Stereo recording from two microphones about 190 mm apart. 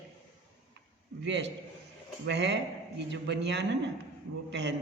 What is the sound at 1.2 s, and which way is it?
Speech, 70° right (ahead or behind).